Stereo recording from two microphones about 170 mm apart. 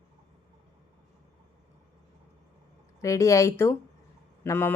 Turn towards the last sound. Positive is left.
turn(degrees=10)  # may be behind; listen again after turning